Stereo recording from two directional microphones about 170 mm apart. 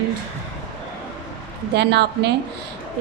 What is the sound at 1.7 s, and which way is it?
Speech, 75° right (ahead or behind).